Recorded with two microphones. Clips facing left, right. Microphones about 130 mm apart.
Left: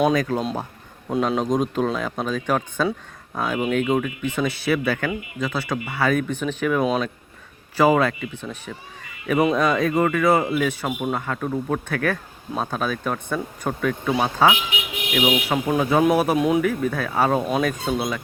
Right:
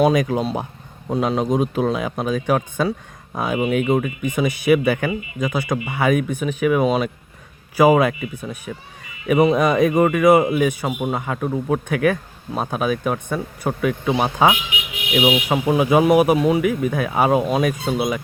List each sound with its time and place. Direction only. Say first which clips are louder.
0.1 s speech: right 2 dB; 15° right (ahead or behind)
0.5 s a sound: right 3 dB; 15° right (ahead or behind)
1.1 s speech: right 2 dB; centre (ahead or behind)
16.6 s speech: right 3 dB; 10° right (ahead or behind)